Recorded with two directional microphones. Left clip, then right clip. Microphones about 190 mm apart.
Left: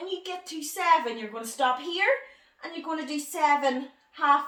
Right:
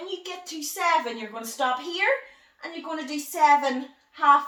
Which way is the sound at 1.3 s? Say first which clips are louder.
Left 1 dB; 20° left (ahead or behind).